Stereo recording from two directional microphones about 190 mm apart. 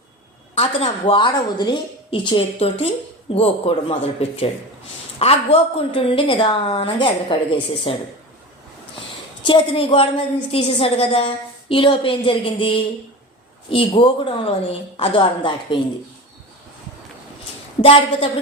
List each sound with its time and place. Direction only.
0.5 s a woman's voice: 30° left (ahead or behind)
5.2 s a woman's voice: 30° left (ahead or behind)
9.4 s a woman's voice: 25° left (ahead or behind)
17.8 s a woman's voice: 30° left (ahead or behind)